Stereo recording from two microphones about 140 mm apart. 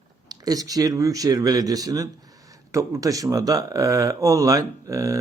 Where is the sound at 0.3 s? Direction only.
25° right (ahead or behind).